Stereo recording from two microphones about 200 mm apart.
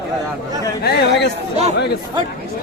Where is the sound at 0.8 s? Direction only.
55° left (ahead or behind).